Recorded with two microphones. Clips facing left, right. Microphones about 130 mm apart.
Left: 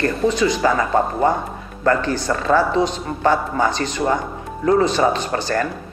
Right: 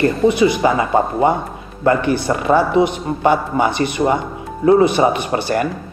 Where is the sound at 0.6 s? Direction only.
15° right (ahead or behind).